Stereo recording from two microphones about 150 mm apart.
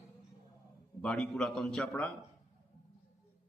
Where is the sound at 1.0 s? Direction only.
5° left (ahead or behind).